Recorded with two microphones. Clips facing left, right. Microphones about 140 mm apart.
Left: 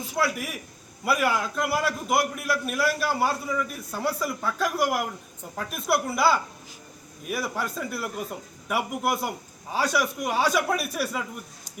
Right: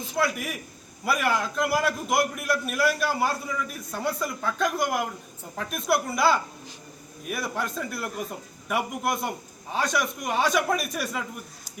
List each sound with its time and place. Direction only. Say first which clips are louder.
0.1 s a man's voice: even; centre (ahead or behind)